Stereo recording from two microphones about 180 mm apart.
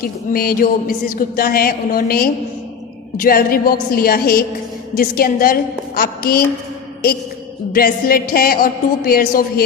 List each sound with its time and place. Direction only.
0.3 s speech: 55° left (ahead or behind)
7.7 s speech: 55° left (ahead or behind)